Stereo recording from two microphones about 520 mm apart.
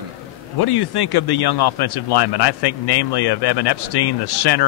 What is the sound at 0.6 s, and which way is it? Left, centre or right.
Speech, left.